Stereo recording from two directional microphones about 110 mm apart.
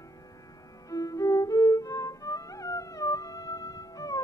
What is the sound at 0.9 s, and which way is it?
Music, 30° left (ahead or behind).